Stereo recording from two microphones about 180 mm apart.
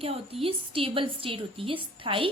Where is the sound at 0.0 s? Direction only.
30° right (ahead or behind).